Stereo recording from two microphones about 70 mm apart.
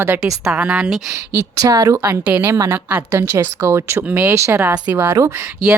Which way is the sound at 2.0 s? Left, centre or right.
Right.